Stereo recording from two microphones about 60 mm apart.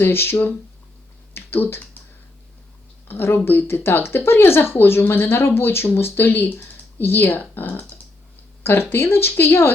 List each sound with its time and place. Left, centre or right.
0.0 s speech: left
1.3 s typing: left
3.1 s speech: left